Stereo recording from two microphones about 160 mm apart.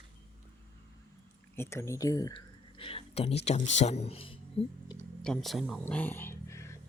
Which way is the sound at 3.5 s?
45° left (ahead or behind).